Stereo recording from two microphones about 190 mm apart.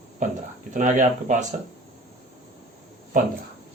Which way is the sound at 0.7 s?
40° right (ahead or behind).